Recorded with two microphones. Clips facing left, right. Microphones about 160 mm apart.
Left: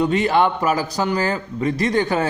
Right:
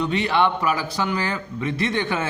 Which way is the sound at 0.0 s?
45° left (ahead or behind).